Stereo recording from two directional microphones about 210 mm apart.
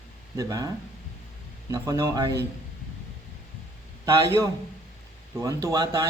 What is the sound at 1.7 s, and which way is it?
Speech, 15° right (ahead or behind).